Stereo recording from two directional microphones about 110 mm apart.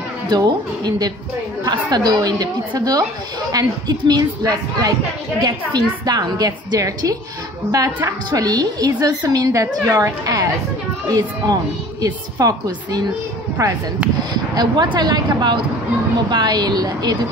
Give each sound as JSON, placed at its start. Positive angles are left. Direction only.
{"t": 0.3, "sound": "a woman's voice", "side_deg": -35}
{"t": 8.3, "sound": "a woman's voice", "side_deg": -35}